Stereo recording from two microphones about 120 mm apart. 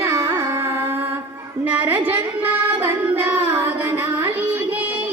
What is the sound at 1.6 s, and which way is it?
Singing, 15° right (ahead or behind).